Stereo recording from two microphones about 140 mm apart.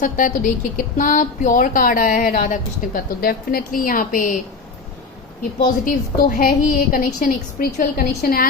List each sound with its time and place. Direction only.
0.0 s speech: 70° left (ahead or behind)
5.4 s a woman's voice: 80° left